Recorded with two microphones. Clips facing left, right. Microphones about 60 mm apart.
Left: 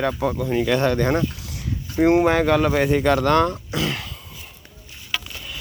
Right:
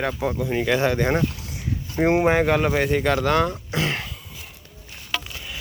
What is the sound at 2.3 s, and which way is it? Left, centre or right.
Speech, centre.